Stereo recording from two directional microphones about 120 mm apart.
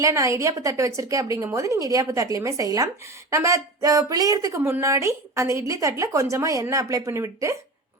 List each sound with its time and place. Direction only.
0.0 s a woman's voice: 25° right (ahead or behind)